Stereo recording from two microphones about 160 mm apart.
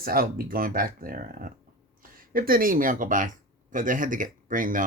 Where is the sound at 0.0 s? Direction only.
65° right (ahead or behind).